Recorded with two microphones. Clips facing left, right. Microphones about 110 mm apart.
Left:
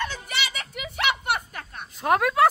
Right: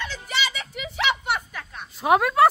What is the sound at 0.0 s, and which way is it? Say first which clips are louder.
Music: right 1 dB; 55° left (ahead or behind).